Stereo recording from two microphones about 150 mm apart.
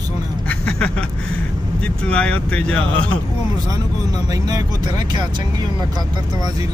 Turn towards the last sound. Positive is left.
turn(degrees=-25)  # may be behind; listen again after turning